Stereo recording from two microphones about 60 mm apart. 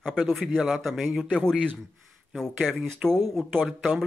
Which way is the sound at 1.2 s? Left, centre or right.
Centre.